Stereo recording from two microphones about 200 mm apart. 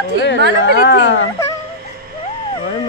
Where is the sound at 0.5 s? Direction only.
60° left (ahead or behind).